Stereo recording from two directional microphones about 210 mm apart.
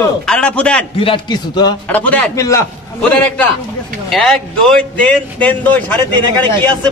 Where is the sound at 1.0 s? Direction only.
20° left (ahead or behind).